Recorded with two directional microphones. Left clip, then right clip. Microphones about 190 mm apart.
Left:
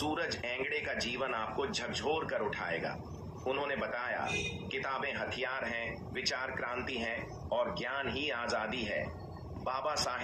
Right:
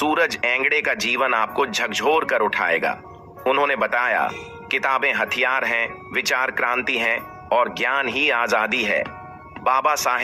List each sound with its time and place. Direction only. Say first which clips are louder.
0.1 s speech: right 16 dB; 30° right (ahead or behind)